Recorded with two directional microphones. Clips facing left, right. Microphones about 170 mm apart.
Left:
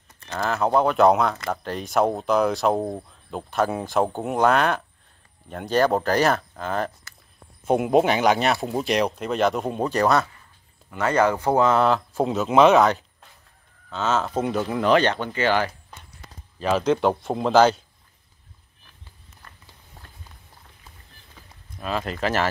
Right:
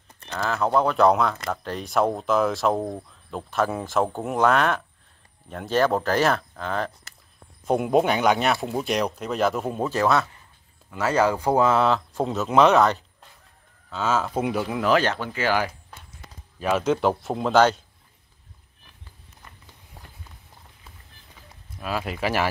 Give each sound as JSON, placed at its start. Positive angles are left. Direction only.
{"t": 0.3, "sound": "speech", "side_deg": 5}
{"t": 13.8, "sound": "speech", "side_deg": -10}
{"t": 19.4, "sound": "walk", "side_deg": -15}
{"t": 21.7, "sound": "speech", "side_deg": -5}